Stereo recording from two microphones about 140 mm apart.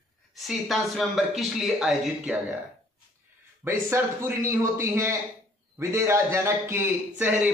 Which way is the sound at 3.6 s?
20° right (ahead or behind).